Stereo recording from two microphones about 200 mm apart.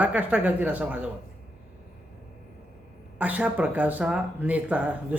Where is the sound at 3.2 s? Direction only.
5° right (ahead or behind).